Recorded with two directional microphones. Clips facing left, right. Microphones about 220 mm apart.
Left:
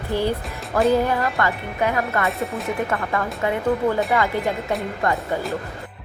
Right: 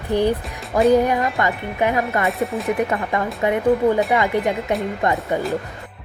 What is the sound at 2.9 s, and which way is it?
Speech, 20° right (ahead or behind).